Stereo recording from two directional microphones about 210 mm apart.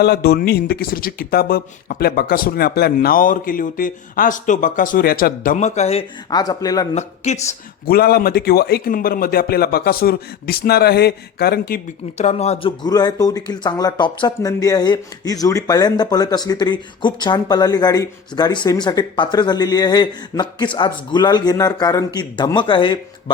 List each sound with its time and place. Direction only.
0.0 s speech: 50° left (ahead or behind); by 6.8 s 15° left (ahead or behind)
6.9 s speech: 30° left (ahead or behind)
7.9 s speech: 45° left (ahead or behind)
12.1 s speech: 30° left (ahead or behind)
12.8 s speech: 20° left (ahead or behind)